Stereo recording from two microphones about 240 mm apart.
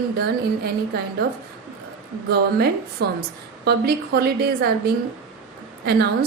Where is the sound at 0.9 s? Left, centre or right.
Right.